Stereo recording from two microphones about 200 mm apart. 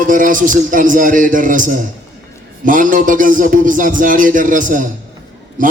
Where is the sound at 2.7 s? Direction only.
40° right (ahead or behind).